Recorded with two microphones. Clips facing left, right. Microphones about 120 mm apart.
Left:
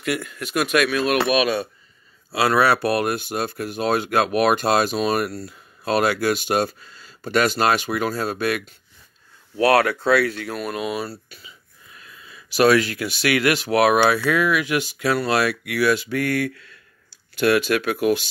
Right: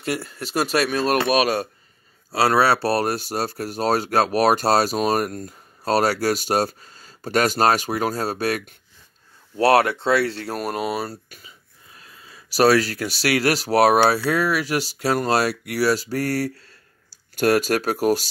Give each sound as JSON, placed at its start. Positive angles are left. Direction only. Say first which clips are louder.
{"t": 0.0, "sound": "speech", "louder": "left 1 dB", "side_deg": -35}
{"t": 9.6, "sound": "speech", "louder": "right 1 dB", "side_deg": -25}